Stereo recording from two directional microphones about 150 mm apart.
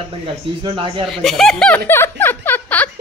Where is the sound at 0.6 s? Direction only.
35° right (ahead or behind).